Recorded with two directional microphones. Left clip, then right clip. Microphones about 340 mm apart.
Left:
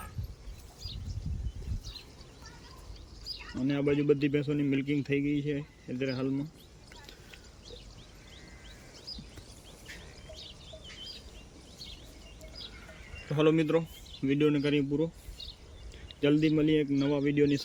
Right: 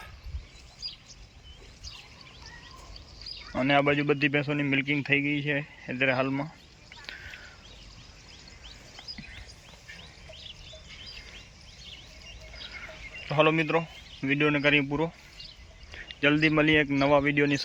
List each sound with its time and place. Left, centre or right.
3.7 s speech: centre
13.2 s speech: centre